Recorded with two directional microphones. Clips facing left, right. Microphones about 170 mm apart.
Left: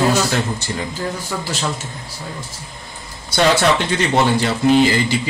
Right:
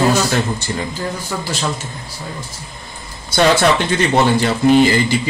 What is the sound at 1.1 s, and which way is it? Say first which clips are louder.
Speech: right 1 dB; centre (ahead or behind).